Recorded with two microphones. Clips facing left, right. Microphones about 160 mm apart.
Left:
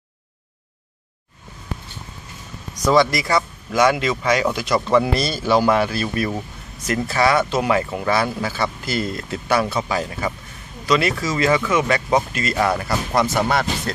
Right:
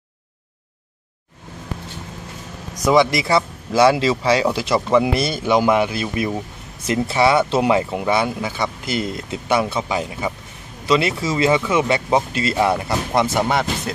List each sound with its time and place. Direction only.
2.8 s speech: 15° right (ahead or behind)
4.8 s speech: 15° right (ahead or behind)